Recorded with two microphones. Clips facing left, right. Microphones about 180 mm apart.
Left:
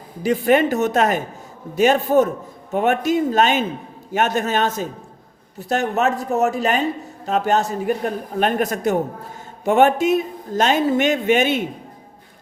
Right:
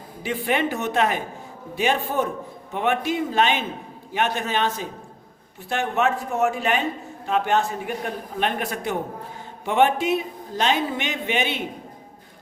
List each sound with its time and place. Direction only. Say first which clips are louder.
0.2 s a man's voice: left 8 dB; 40° left (ahead or behind)